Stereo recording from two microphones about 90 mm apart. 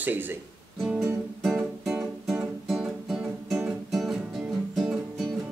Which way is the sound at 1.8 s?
5° right (ahead or behind).